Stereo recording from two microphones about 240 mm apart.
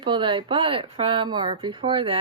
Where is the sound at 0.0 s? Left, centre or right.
Right.